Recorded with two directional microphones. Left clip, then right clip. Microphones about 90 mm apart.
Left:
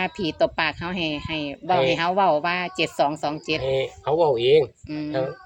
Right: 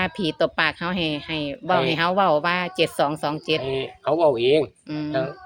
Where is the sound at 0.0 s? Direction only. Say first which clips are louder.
Even; 40° right (ahead or behind).